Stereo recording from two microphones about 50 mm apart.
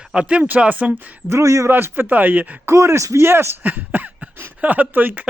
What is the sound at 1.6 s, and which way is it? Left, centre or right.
Speech, right.